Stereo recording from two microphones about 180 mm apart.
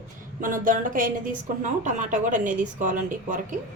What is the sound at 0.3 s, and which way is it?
A woman's voice, 50° right (ahead or behind).